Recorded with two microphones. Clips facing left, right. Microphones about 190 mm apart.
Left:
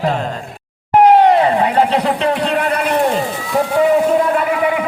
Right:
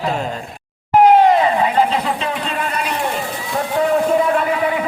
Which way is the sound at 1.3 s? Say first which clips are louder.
Left 2 dB; 55° left (ahead or behind).